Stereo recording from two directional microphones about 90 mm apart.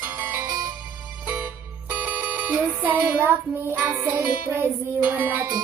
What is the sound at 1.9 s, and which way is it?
Music, 15° right (ahead or behind).